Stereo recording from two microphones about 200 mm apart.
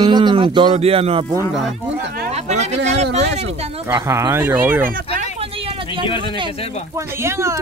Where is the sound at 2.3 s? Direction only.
35° right (ahead or behind).